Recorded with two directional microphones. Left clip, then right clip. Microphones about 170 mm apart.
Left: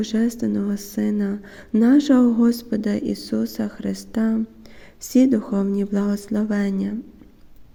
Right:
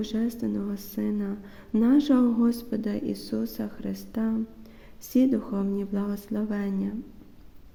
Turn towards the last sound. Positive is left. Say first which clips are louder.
# left 7 dB
turn(degrees=25)  # may be behind; listen again after turning